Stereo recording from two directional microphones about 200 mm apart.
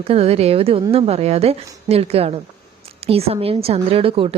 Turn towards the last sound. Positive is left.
turn(degrees=-25)  # may be behind; listen again after turning